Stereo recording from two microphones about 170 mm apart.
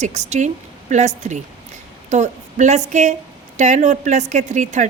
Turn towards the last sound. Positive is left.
turn(degrees=-45)  # may be behind; listen again after turning